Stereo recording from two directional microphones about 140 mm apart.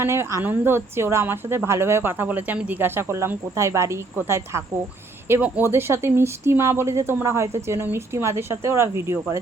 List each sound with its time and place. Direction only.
0.0 s speech: 15° right (ahead or behind)